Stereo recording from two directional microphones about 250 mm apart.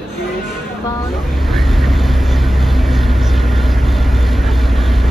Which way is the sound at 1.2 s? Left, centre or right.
Centre.